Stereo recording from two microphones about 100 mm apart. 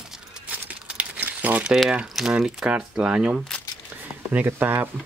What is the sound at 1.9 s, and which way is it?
Speech, 5° right (ahead or behind).